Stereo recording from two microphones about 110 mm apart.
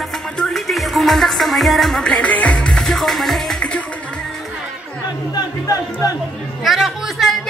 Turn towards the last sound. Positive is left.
turn(degrees=0)  # may be behind; listen again after turning